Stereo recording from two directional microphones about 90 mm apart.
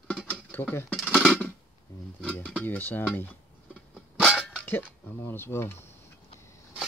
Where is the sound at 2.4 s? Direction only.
15° left (ahead or behind).